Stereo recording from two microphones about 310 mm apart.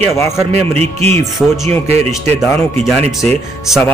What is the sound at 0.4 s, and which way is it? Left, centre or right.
Speech, centre.